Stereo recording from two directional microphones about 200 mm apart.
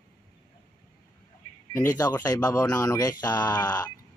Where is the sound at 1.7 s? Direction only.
15° left (ahead or behind).